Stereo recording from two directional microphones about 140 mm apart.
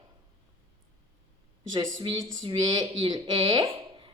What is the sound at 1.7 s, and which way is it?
Speech, 35° right (ahead or behind).